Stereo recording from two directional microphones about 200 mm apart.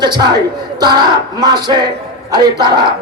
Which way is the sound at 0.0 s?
20° right (ahead or behind).